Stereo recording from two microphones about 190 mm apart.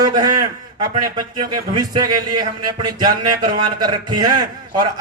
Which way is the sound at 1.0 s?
20° right (ahead or behind).